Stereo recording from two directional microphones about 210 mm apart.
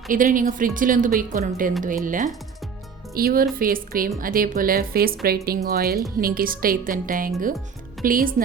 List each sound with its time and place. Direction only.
0.1 s speech: 40° right (ahead or behind)